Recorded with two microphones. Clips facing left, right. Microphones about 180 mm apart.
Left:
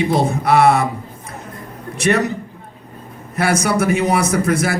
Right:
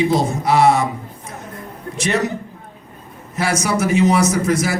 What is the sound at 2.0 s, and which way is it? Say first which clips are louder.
Speech: left 3 dB; 60° left (ahead or behind).